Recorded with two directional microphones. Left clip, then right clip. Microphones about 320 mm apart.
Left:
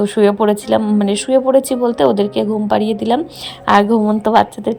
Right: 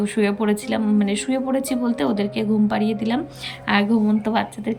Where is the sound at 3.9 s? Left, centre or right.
Left.